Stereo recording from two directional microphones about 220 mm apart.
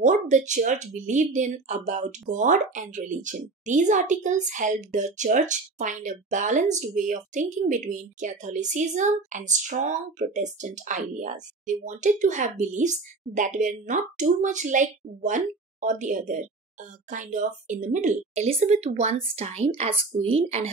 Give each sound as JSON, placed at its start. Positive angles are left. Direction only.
{"t": 0.0, "sound": "a woman's voice", "side_deg": -35}